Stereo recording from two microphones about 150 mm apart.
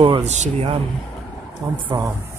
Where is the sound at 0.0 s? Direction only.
45° right (ahead or behind).